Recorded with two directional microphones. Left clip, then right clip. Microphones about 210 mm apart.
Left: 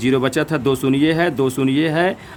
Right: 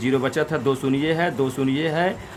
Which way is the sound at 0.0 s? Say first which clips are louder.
Left 4 dB; 40° left (ahead or behind).